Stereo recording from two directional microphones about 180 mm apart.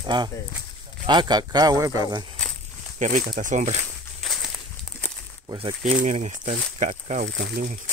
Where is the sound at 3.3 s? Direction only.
45° right (ahead or behind).